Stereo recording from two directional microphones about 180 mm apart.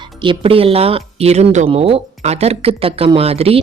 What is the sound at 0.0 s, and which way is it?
Speech, 25° right (ahead or behind).